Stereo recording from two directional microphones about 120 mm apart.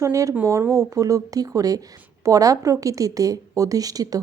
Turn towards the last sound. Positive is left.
turn(degrees=-30)  # may be behind; listen again after turning